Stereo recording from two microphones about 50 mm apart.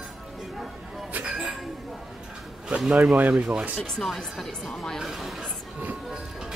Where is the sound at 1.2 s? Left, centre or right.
Centre.